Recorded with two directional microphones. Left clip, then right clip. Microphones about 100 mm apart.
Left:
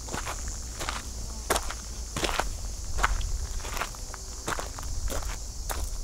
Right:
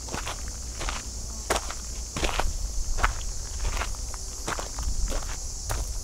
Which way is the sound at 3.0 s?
10° left (ahead or behind).